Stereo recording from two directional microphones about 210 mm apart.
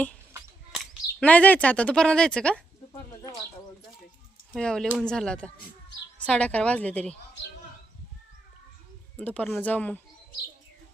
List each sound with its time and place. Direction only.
1.2 s a woman's voice: 5° left (ahead or behind)
4.5 s a woman's voice: 5° left (ahead or behind)
9.1 s speech: 5° left (ahead or behind)